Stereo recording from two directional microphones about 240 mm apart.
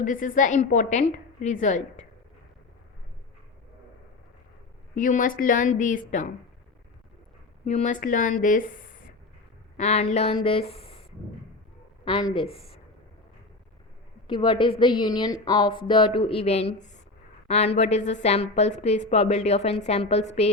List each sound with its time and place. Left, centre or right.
0.0 s a woman's voice: left
4.9 s a woman's voice: left
7.6 s a woman's voice: left
9.7 s a woman's voice: left
12.0 s a woman's voice: left
14.3 s a woman's voice: left